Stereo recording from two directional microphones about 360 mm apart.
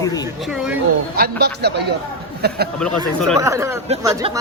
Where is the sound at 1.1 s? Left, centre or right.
Right.